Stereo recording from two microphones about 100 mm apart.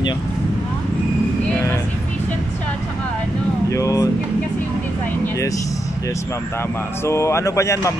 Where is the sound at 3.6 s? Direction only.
35° left (ahead or behind).